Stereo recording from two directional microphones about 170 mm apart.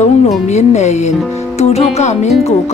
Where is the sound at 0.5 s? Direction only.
40° left (ahead or behind).